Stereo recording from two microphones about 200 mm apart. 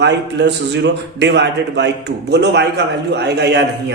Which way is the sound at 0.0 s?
60° right (ahead or behind).